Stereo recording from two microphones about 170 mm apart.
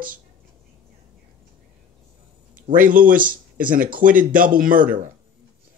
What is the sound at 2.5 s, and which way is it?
Speech, 55° right (ahead or behind).